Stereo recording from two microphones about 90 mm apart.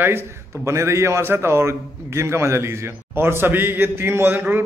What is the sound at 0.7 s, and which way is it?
A man's voice, 30° right (ahead or behind).